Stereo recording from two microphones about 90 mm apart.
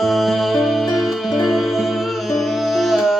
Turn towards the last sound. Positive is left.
turn(degrees=0)  # may be behind; listen again after turning